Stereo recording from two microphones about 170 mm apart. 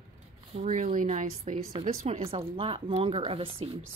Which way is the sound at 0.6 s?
45° right (ahead or behind).